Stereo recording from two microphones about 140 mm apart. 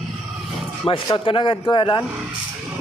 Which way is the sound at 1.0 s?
35° left (ahead or behind).